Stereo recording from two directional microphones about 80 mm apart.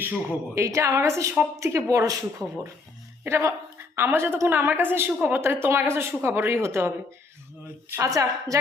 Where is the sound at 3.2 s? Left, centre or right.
Right.